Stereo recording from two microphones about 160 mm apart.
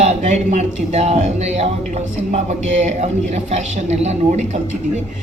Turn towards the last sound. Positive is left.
turn(degrees=-45)  # may be behind; listen again after turning